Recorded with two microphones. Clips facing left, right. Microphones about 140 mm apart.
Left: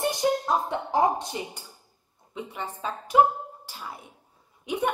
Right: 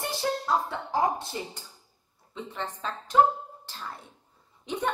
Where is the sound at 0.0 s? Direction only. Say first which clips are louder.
Left 5 dB; 15° left (ahead or behind).